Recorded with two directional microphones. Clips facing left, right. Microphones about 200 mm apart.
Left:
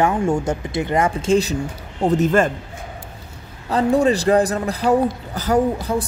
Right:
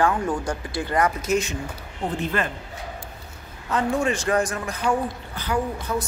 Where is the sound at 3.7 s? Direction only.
35° left (ahead or behind).